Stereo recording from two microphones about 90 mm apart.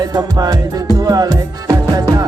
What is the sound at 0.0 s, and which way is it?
Music, 45° right (ahead or behind).